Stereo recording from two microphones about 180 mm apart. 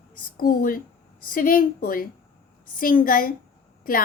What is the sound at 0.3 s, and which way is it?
A woman's voice, 50° left (ahead or behind).